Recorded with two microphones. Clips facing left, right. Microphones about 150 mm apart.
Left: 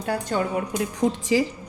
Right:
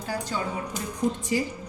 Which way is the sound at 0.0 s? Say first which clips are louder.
Left 5 dB; 60° left (ahead or behind).